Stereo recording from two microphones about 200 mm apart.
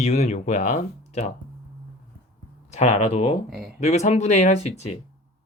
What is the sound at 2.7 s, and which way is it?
Speech, 35° left (ahead or behind).